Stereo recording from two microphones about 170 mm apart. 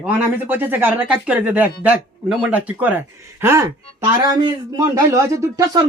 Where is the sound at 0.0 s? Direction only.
10° right (ahead or behind).